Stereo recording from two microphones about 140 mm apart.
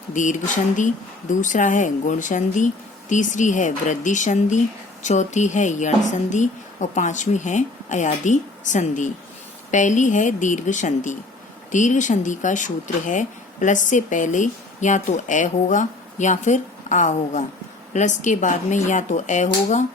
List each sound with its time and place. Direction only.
0.1 s speech: 65° left (ahead or behind)